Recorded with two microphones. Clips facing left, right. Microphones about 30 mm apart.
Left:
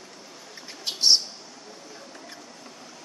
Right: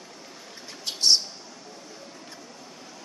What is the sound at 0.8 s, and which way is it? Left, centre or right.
Bird, centre.